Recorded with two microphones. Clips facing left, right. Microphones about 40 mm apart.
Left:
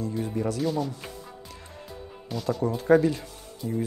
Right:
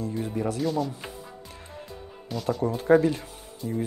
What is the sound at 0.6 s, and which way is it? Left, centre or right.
Speech, centre.